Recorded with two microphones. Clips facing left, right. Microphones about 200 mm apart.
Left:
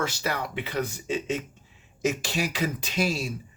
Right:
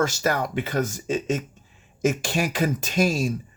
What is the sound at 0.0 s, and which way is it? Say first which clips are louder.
Speech: right 6 dB; 45° right (ahead or behind).